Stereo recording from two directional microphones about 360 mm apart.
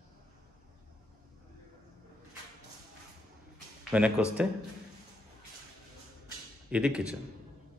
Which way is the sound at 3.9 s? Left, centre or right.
Centre.